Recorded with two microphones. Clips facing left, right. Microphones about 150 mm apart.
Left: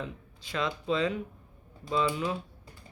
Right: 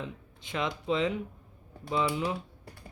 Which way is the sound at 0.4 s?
20° right (ahead or behind).